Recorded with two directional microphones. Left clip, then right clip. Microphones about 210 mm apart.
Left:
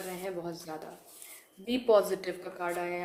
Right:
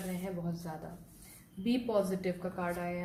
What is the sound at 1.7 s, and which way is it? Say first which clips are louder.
Speech: left 7 dB; 45° left (ahead or behind).